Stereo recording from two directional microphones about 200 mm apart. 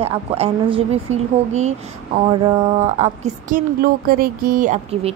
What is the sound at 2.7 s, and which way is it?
Speech, 35° right (ahead or behind).